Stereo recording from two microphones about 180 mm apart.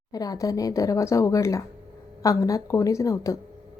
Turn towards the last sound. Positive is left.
turn(degrees=20)  # may be behind; listen again after turning